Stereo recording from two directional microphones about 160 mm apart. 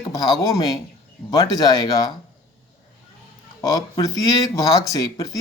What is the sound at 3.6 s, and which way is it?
Speech, 25° left (ahead or behind).